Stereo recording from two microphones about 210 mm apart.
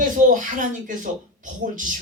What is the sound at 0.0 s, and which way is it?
Speech, 40° right (ahead or behind).